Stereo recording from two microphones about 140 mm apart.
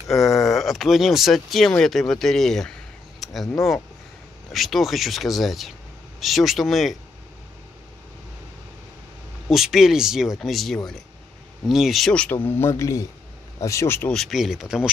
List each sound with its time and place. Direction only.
0.1 s speech: centre (ahead or behind)
3.2 s a sound: centre (ahead or behind)
4.5 s speech: centre (ahead or behind)
9.5 s speech: centre (ahead or behind)
12.4 s a man's voice: 20° left (ahead or behind)
14.1 s speech: centre (ahead or behind)